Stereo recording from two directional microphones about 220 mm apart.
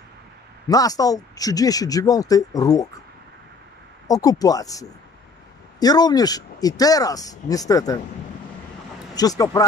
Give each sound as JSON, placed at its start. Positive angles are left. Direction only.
{"t": 0.7, "sound": "speech", "side_deg": 15}
{"t": 4.1, "sound": "speech", "side_deg": 15}
{"t": 9.1, "sound": "speech", "side_deg": 15}